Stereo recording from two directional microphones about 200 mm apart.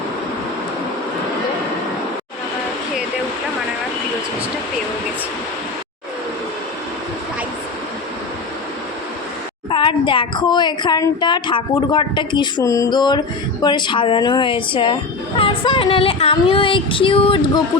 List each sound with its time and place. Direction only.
9.6 s a woman's voice: 25° left (ahead or behind)